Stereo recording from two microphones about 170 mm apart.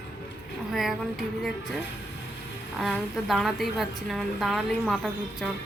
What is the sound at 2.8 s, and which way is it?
A woman's voice, centre (ahead or behind).